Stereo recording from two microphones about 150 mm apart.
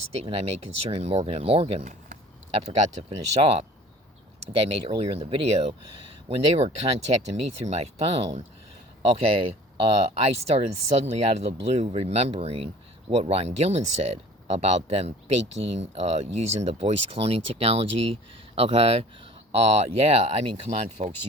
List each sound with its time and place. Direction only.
0.2 s speech: 40° right (ahead or behind)